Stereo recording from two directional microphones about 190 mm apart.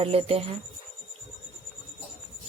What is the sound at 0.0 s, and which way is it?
Speech, 30° right (ahead or behind).